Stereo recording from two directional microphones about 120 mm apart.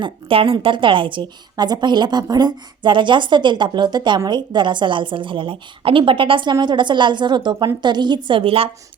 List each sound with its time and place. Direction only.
0.0 s a woman's voice: 50° right (ahead or behind)